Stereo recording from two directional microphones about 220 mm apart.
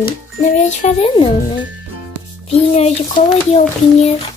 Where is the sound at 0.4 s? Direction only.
35° left (ahead or behind).